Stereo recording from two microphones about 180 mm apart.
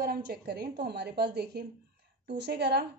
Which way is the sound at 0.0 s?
60° right (ahead or behind).